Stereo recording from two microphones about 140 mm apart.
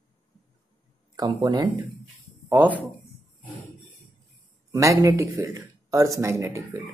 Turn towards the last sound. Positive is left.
turn(degrees=-20)  # may be behind; listen again after turning